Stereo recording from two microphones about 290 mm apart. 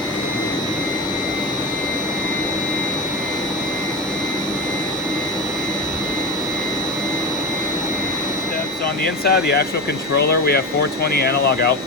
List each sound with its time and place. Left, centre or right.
9.2 s speech: left